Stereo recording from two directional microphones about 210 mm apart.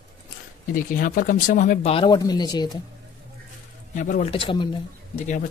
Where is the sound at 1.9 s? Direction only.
20° left (ahead or behind).